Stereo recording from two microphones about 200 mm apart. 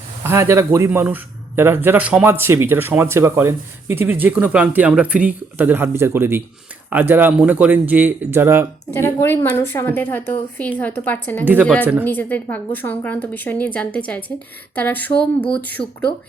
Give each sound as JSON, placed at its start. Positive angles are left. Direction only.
{"t": 0.2, "sound": "speech", "side_deg": -10}
{"t": 8.9, "sound": "a woman's voice", "side_deg": 10}